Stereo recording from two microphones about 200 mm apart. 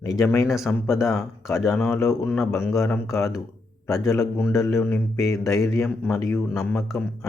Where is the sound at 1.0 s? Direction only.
Centre (ahead or behind).